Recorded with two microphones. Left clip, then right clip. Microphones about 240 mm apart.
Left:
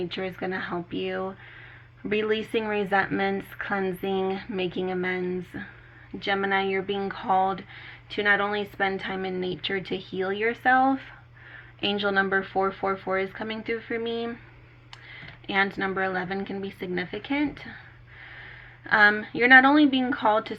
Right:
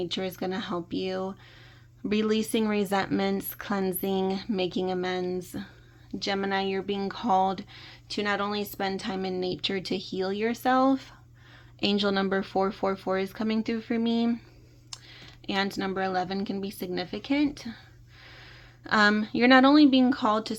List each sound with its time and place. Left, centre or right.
0.1 s speech: right
2.0 s speech: right
11.8 s speech: right